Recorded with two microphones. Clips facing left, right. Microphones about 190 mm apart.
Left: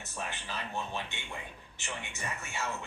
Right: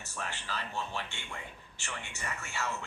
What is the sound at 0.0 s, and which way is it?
Speech, 20° left (ahead or behind).